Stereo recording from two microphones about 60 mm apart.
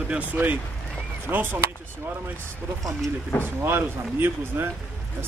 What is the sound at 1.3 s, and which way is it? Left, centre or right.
Speech, right.